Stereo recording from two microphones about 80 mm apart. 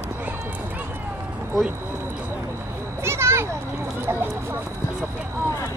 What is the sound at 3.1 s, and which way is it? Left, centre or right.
Children playing, right.